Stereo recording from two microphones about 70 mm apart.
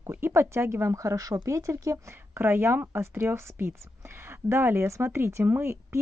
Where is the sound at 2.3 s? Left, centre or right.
Right.